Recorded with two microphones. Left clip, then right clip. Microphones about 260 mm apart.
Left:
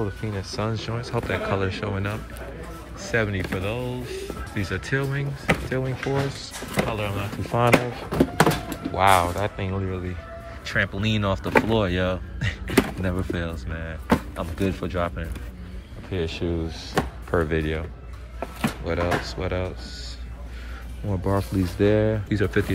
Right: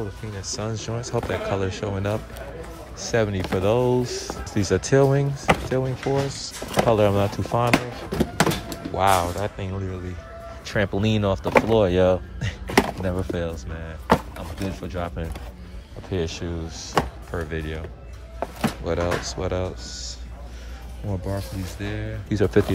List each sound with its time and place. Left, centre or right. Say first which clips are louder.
0.0 s speech: left 3 dB; centre; by 7.5 s right
7.5 s thunk: left 3 dB; centre
8.9 s speech: left 1 dB; centre
18.9 s speech: even; centre
21.1 s speech: left 5 dB; centre
22.3 s speech: right 3 dB; centre